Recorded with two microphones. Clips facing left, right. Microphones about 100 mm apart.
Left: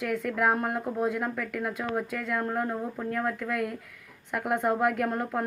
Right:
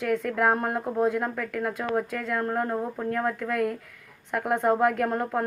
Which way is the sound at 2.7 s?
15° right (ahead or behind).